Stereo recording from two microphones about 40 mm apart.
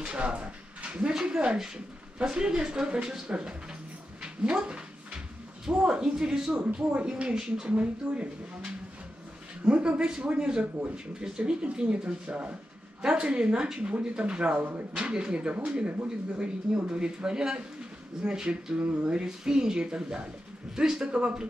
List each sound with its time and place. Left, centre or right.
0.0 s a sound: right
1.1 s speech: right
4.2 s a sound: right
5.7 s speech: right
6.9 s speech: right
7.6 s speech: right
18.8 s speech: right
19.0 s speech: centre